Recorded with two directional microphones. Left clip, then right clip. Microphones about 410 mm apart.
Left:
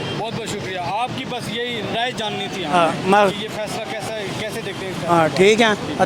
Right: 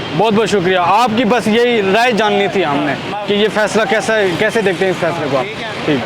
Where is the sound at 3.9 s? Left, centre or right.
Right.